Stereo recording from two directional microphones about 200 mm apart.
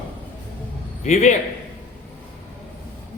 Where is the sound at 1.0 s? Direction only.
35° left (ahead or behind).